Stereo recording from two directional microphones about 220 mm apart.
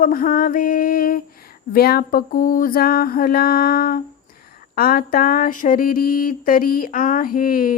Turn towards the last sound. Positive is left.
turn(degrees=40)  # may be behind; listen again after turning